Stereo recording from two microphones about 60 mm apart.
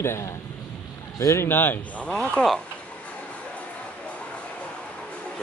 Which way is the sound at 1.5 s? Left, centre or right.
Left.